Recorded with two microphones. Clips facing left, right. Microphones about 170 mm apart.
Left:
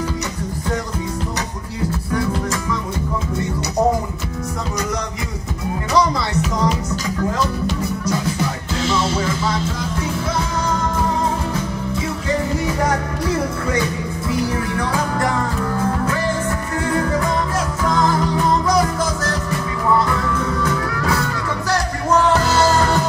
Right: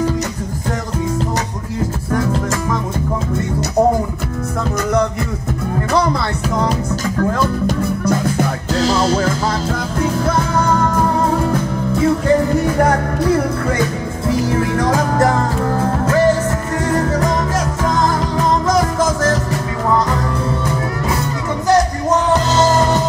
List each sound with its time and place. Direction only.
2.1 s music: 50° right (ahead or behind)
5.9 s music: 55° right (ahead or behind)
8.7 s music: 40° right (ahead or behind)
10.2 s music: 55° right (ahead or behind)
12.6 s music: 55° right (ahead or behind)
14.6 s music: 45° right (ahead or behind)
21.6 s music: 20° right (ahead or behind)